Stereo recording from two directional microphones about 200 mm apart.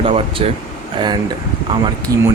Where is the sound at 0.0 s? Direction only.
30° right (ahead or behind).